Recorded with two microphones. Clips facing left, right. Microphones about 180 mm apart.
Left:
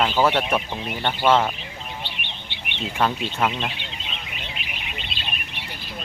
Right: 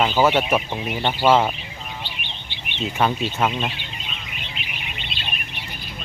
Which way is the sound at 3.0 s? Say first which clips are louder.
Right 1 dB; 10° right (ahead or behind).